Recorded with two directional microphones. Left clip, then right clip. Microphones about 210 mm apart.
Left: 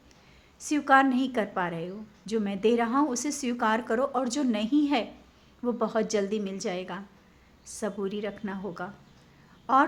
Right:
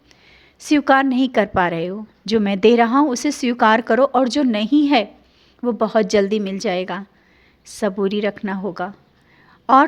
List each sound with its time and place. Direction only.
0.6 s a woman's voice: 40° right (ahead or behind)